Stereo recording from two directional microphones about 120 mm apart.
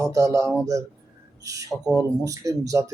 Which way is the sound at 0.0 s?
25° right (ahead or behind).